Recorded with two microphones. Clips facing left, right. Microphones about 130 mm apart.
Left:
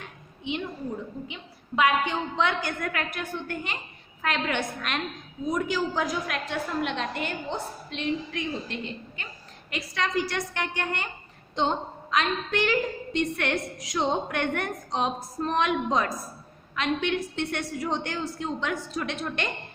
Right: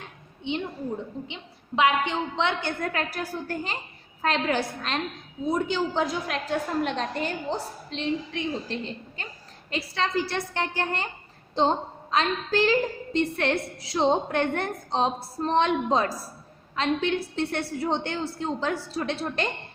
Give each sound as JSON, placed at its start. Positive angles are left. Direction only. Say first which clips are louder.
{"t": 1.3, "sound": "a woman's voice", "louder": "right 1 dB", "side_deg": -25}